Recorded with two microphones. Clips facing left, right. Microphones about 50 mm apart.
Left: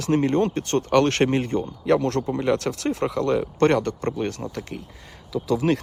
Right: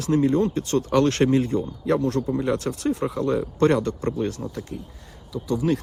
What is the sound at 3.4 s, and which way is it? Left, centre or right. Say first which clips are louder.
Speech: even; left.